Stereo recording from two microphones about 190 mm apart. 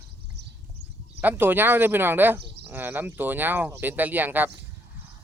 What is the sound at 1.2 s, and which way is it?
Speech, 10° right (ahead or behind).